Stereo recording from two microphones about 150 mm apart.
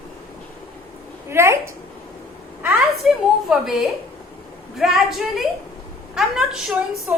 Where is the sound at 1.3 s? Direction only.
15° right (ahead or behind).